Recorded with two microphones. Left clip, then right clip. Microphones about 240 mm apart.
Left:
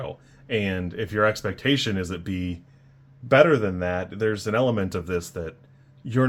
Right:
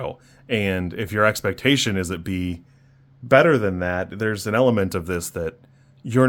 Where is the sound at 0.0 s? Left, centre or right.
Right.